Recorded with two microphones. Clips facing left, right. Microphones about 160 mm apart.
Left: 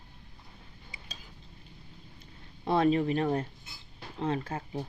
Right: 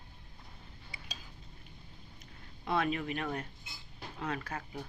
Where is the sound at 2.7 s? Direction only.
30° left (ahead or behind).